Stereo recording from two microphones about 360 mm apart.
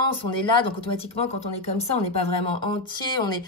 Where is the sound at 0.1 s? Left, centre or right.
Centre.